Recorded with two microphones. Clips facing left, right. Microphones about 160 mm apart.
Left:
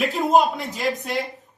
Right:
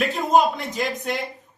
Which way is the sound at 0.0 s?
Centre (ahead or behind).